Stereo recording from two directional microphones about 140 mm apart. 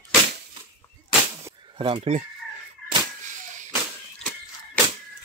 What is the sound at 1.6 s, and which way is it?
Speech, 40° right (ahead or behind).